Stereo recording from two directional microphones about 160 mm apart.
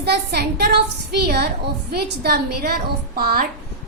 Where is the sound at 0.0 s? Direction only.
85° right.